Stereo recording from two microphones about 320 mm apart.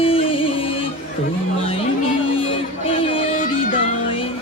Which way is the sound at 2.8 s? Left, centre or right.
Centre.